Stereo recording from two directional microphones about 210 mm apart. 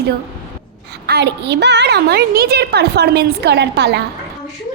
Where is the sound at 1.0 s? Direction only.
50° right (ahead or behind).